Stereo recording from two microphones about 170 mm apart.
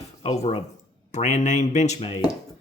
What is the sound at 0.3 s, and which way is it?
Speech, 40° left (ahead or behind).